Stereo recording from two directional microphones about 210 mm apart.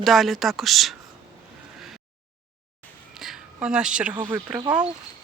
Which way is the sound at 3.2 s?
5° right (ahead or behind).